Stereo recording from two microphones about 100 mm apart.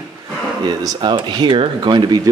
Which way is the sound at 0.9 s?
55° right (ahead or behind).